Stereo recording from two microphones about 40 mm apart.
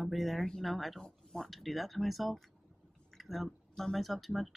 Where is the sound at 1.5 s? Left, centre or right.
Centre.